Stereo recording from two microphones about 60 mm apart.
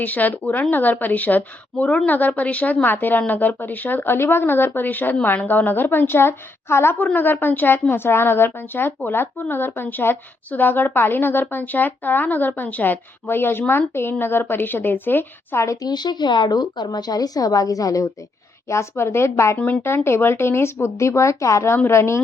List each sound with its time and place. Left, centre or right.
0.0 s a woman's voice: left
7.0 s a woman's voice: left
15.5 s a woman's voice: left
17.1 s a woman's voice: left
18.7 s speech: left
19.5 s a woman's voice: left
19.8 s speech: left